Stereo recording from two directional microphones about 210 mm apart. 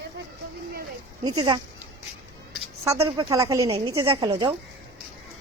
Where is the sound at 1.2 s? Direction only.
20° right (ahead or behind).